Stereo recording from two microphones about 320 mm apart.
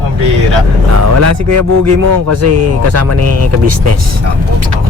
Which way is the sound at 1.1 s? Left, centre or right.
Right.